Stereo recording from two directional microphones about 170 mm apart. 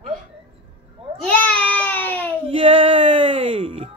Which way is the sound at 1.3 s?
5° left (ahead or behind).